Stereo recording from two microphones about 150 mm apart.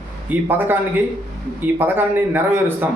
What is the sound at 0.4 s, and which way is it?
A man's voice, 15° right (ahead or behind).